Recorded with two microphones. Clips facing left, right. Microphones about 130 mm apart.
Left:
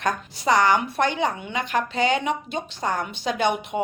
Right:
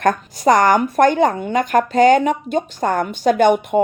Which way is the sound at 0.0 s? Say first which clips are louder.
Right 9 dB; 50° right (ahead or behind).